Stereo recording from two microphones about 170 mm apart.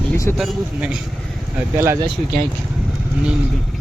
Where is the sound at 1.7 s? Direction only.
15° right (ahead or behind).